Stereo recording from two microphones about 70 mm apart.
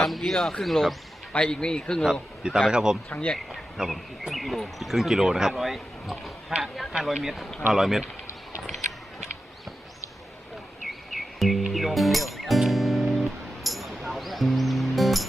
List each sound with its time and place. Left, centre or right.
0.0 s speech: centre
1.3 s speech: centre
2.6 s speech: centre
3.1 s speech: centre
3.3 s speech: centre
10.8 s music: centre